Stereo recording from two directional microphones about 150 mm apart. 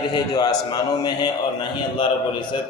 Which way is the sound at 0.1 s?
25° left (ahead or behind).